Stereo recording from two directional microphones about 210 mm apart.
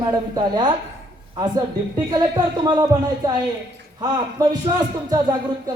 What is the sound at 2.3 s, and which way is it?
Speech, 20° right (ahead or behind).